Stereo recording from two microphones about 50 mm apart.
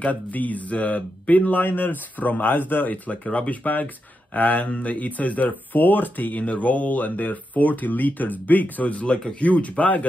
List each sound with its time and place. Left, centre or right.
0.0 s speech: left